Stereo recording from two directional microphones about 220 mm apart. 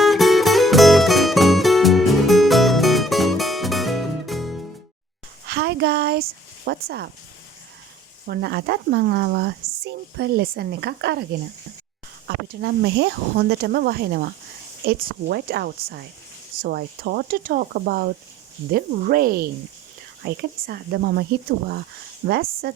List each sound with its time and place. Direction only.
0.0 s music: centre (ahead or behind)
5.5 s a sound: 45° right (ahead or behind)
6.7 s speech: 50° right (ahead or behind)
8.3 s speech: 50° right (ahead or behind)
12.3 s speech: 50° right (ahead or behind)
22.3 s speech: 45° right (ahead or behind)